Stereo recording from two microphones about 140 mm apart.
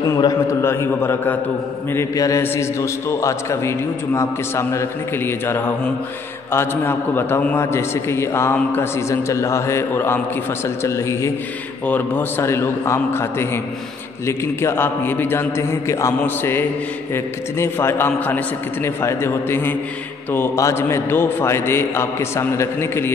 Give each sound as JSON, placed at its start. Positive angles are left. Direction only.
{"t": 0.0, "sound": "a man's voice", "side_deg": 25}